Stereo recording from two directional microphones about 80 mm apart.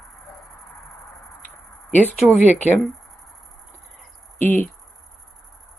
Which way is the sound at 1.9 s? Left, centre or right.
Left.